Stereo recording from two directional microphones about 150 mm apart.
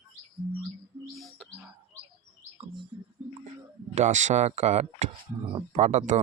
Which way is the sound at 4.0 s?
55° right (ahead or behind).